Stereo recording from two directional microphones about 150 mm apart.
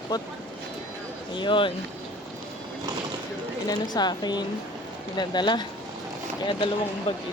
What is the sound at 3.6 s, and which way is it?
Speech, 25° left (ahead or behind).